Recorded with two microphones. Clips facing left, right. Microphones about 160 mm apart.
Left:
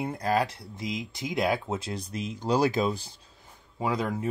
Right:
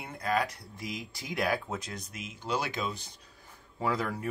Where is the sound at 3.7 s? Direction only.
15° left (ahead or behind).